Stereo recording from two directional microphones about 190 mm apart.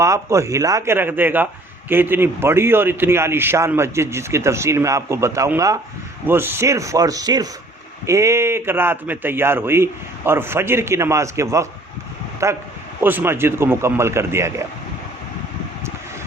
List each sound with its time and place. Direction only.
0.0 s a man's voice: 15° right (ahead or behind)